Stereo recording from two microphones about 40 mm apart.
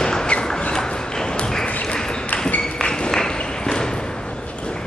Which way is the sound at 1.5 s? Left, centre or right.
Centre.